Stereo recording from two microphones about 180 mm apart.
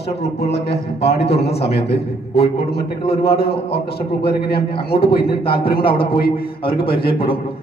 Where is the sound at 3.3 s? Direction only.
60° left (ahead or behind).